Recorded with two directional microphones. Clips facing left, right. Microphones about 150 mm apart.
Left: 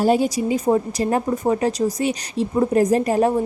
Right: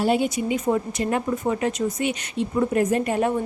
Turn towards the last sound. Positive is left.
turn(degrees=35)  # may be behind; listen again after turning